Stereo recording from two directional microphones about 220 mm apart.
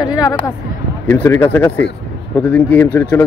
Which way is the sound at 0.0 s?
20° left (ahead or behind).